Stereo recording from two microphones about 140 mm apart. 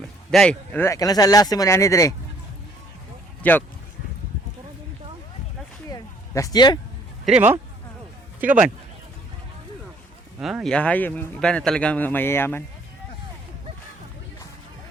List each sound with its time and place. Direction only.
0.3 s speech: 5° left (ahead or behind); by 2.1 s 20° left (ahead or behind)
3.4 s a man's voice: 10° left (ahead or behind)
5.9 s a sound: 25° left (ahead or behind)
7.3 s speech: 10° right (ahead or behind)
10.4 s a man's voice: centre (ahead or behind); by 12.6 s 15° left (ahead or behind)